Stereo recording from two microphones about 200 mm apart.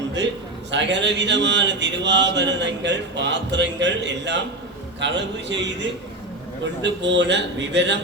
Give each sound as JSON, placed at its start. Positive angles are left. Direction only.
{"t": 0.7, "sound": "speech", "side_deg": -60}